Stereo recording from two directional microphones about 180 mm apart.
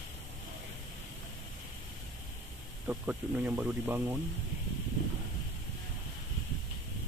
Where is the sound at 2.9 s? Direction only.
10° right (ahead or behind).